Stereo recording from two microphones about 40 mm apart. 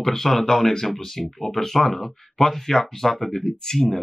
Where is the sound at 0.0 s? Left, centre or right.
Centre.